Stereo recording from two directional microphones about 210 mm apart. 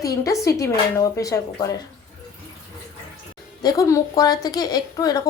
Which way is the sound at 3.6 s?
15° left (ahead or behind).